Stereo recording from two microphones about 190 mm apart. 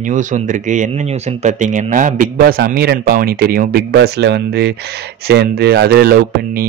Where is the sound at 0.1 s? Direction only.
40° right (ahead or behind).